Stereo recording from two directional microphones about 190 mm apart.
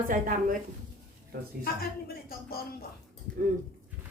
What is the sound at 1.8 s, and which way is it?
Speech, 50° left (ahead or behind).